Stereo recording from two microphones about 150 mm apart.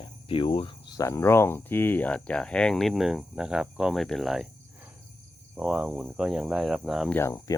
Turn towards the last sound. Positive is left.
turn(degrees=20)  # may be behind; listen again after turning